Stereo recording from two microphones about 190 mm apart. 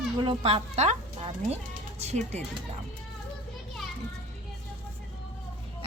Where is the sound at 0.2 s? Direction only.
30° right (ahead or behind).